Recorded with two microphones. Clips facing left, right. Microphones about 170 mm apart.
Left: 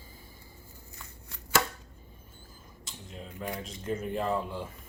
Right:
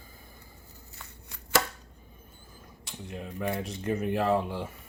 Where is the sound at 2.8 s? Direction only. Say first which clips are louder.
Right 5 dB; 65° right (ahead or behind); by 4.6 s 80° right.